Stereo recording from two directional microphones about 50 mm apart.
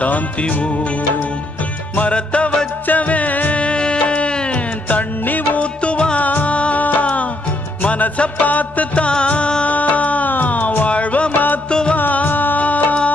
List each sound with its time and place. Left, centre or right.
0.0 s music: left
3.6 s music: centre; by 5.6 s left
5.6 s music: left
12.0 s music: left